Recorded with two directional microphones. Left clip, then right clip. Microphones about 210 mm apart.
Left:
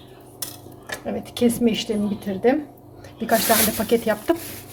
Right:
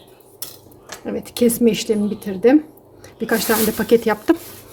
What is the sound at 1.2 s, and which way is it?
Speech, 45° right (ahead or behind).